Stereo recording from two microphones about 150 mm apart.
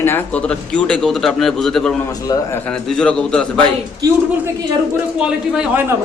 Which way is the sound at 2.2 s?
25° left (ahead or behind).